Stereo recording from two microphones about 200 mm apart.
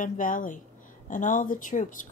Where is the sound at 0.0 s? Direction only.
40° left (ahead or behind).